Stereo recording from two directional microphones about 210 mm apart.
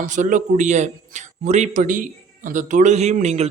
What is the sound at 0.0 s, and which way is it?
A man's voice, 35° right (ahead or behind).